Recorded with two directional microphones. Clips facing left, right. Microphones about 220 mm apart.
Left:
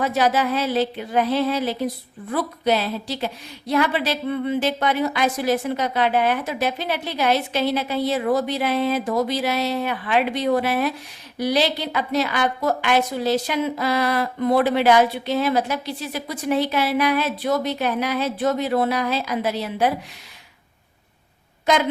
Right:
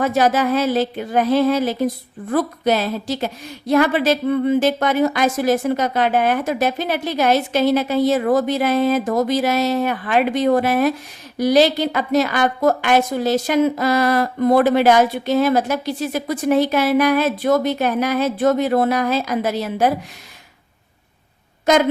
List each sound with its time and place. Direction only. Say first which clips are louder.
0.0 s a woman's voice: right 3 dB; 45° right (ahead or behind)